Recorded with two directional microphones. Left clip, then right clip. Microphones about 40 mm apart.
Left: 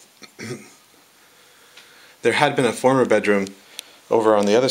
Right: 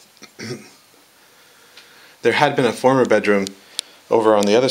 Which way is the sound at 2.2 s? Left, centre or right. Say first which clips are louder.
Right 2 dB; left.